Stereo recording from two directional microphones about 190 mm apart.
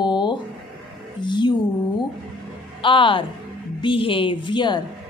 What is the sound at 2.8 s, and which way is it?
A woman's voice, 25° left (ahead or behind).